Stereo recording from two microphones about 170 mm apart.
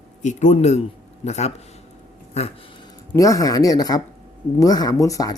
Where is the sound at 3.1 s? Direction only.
20° left (ahead or behind).